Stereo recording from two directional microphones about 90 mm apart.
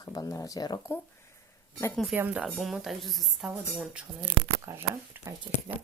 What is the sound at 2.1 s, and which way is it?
Speech, 20° right (ahead or behind).